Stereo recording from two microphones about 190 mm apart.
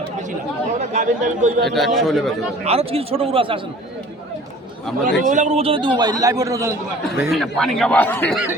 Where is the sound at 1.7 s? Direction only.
Centre (ahead or behind).